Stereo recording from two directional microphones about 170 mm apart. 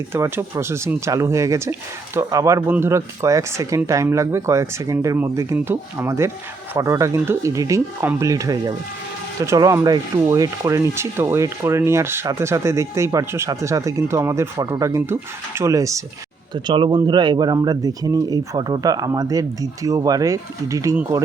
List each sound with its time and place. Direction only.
0.1 s speech: 15° right (ahead or behind)